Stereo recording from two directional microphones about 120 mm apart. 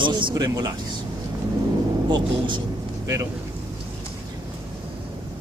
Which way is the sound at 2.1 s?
40° right (ahead or behind).